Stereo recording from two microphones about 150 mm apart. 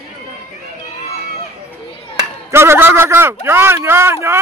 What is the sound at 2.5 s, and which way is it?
A man's voice, 15° right (ahead or behind).